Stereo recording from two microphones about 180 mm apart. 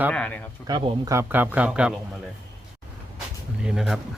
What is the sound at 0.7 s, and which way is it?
Speech, 30° right (ahead or behind).